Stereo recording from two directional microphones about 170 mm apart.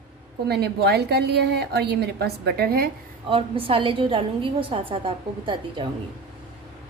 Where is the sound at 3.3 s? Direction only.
30° right (ahead or behind).